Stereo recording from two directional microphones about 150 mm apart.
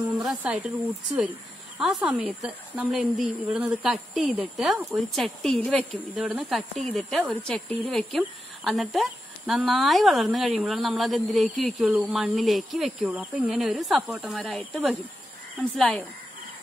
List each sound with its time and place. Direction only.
0.1 s speech: 5° right (ahead or behind)
1.8 s a woman's voice: 5° right (ahead or behind)